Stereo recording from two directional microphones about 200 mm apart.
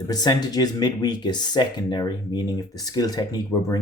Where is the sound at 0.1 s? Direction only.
20° left (ahead or behind).